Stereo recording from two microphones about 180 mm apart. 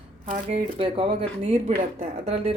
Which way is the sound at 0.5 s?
30° right (ahead or behind).